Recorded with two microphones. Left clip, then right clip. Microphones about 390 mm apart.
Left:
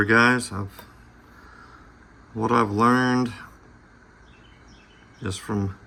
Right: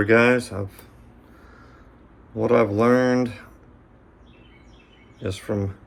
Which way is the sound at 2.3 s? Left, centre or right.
Centre.